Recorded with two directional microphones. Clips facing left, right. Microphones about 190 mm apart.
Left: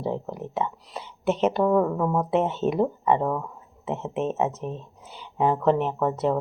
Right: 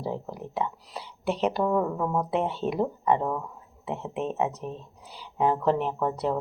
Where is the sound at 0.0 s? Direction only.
5° right (ahead or behind).